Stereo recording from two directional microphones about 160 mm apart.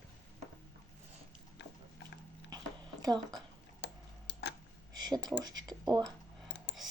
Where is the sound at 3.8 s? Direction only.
90° left.